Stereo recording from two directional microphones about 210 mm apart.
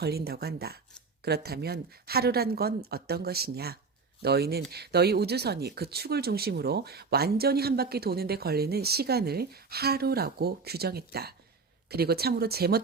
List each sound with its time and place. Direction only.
0.0 s speech: 50° right (ahead or behind)